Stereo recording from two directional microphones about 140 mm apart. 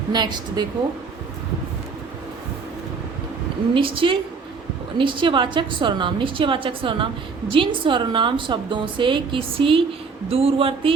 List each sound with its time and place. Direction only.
0.1 s a woman's voice: 30° right (ahead or behind)
3.8 s a woman's voice: 40° right (ahead or behind)